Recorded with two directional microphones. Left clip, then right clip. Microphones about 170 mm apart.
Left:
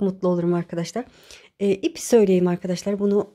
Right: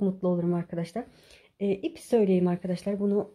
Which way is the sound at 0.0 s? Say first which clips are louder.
Left 6 dB; 25° left (ahead or behind).